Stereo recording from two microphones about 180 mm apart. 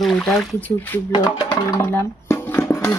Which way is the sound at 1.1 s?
25° left (ahead or behind).